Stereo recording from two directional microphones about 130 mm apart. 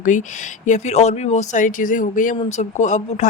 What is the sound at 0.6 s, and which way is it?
Speech, 65° left (ahead or behind).